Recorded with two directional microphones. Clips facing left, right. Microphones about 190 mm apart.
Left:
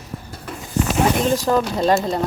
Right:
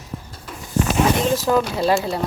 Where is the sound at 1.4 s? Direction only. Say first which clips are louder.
Even; 5° right (ahead or behind).